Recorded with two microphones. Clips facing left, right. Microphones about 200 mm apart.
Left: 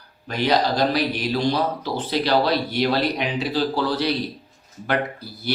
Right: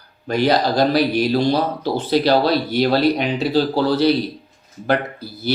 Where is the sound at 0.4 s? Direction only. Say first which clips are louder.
Right 3 dB; 30° right (ahead or behind).